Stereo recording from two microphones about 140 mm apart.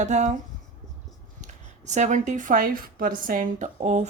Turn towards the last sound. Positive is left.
turn(degrees=-55)  # may be behind; listen again after turning